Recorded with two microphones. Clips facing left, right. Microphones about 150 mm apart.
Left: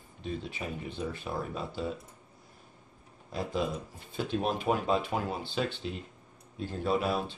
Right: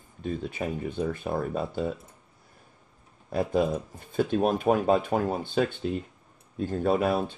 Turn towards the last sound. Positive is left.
turn(degrees=-50)  # may be behind; listen again after turning